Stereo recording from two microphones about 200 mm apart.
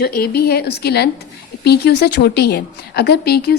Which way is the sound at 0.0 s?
50° left (ahead or behind).